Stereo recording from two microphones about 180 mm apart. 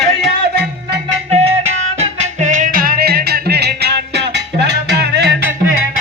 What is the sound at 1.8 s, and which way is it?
Music, 40° right (ahead or behind).